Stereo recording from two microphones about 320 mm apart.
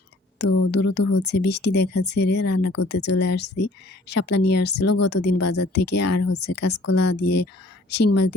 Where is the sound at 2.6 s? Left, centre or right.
Left.